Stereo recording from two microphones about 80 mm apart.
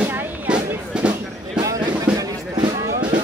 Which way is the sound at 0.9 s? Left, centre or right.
Centre.